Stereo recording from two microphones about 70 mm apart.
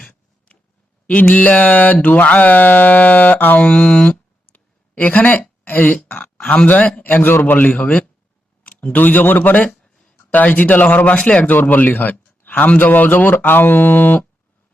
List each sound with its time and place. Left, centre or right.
1.0 s speech: left
3.7 s a sound: centre
6.5 s speech: left
7.7 s speech: centre
9.7 s a sound: centre
10.3 s speech: left